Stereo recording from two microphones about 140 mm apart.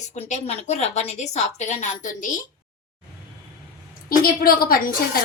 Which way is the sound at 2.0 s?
70° left (ahead or behind).